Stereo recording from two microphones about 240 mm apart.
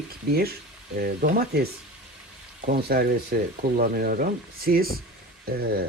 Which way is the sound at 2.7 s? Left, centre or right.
Right.